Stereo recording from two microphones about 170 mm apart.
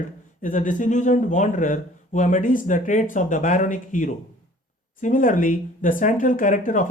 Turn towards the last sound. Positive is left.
turn(degrees=50)  # may be behind; listen again after turning